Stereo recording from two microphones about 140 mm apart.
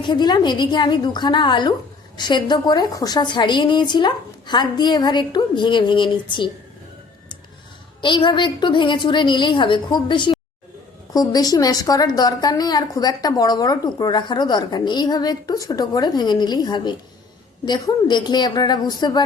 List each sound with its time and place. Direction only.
0.0 s a woman's voice: 30° left (ahead or behind)
8.0 s a woman's voice: 35° left (ahead or behind)